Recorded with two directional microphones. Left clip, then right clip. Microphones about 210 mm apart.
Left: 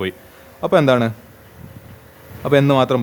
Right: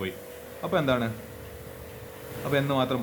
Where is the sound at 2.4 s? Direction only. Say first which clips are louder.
Left 11 dB; 50° left (ahead or behind).